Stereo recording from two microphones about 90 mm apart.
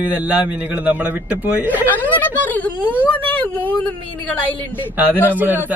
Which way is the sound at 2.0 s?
20° left (ahead or behind).